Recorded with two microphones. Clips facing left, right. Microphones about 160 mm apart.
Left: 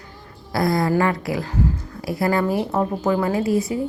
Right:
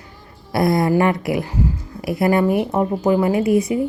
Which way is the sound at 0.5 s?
25° right (ahead or behind).